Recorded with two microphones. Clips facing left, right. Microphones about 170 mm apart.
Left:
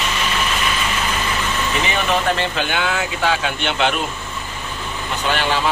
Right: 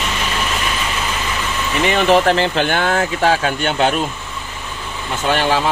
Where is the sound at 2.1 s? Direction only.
70° right (ahead or behind).